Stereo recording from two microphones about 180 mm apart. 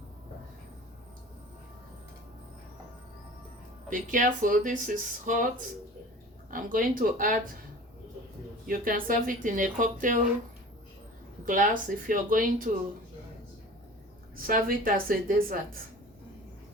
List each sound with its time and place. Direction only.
3.8 s speech: 45° right (ahead or behind)
8.6 s speech: 50° right (ahead or behind)
11.4 s speech: 45° right (ahead or behind)
14.4 s speech: 50° right (ahead or behind)